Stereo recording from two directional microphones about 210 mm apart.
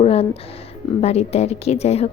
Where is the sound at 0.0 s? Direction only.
30° left (ahead or behind).